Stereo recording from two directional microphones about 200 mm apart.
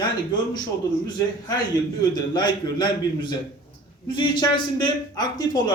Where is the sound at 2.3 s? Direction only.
20° left (ahead or behind).